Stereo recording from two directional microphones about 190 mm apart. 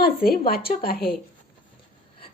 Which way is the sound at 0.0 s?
50° left (ahead or behind).